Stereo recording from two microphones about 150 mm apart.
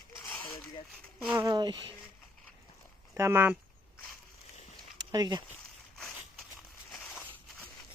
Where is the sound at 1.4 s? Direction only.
30° right (ahead or behind).